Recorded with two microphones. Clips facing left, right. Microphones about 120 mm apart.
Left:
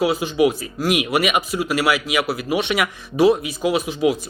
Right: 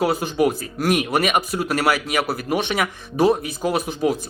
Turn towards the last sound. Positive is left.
turn(degrees=-40)  # may be behind; listen again after turning